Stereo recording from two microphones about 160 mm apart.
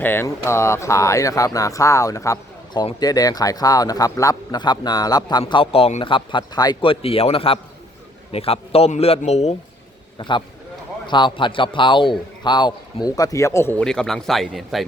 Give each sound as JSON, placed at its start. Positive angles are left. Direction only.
{"t": 0.0, "sound": "a man's voice", "side_deg": 15}
{"t": 10.2, "sound": "speech", "side_deg": 30}
{"t": 13.8, "sound": "speech", "side_deg": 5}